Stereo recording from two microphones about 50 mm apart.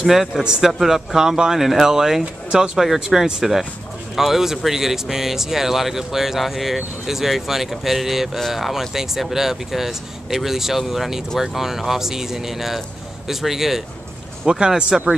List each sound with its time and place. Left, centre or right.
0.0 s speech: centre